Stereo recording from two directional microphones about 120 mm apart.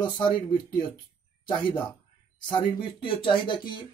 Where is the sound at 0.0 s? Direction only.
40° left (ahead or behind).